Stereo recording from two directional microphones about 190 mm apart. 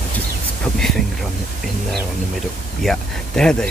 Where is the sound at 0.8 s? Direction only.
Centre (ahead or behind).